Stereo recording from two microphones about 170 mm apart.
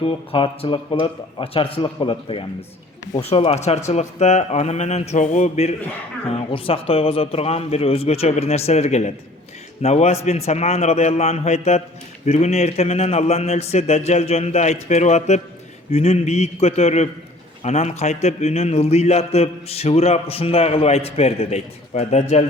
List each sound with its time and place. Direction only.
0.0 s a man's voice: 30° left (ahead or behind)